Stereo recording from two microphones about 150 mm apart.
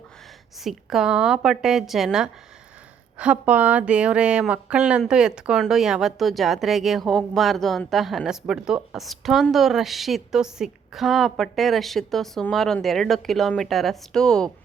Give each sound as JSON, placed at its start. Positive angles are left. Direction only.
{"t": 0.6, "sound": "speech", "side_deg": 0}